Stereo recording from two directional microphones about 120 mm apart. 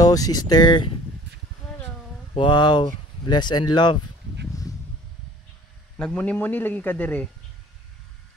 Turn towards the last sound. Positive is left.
turn(degrees=15)  # may be behind; listen again after turning